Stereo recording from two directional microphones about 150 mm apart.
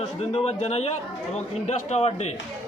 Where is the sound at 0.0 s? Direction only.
45° left (ahead or behind).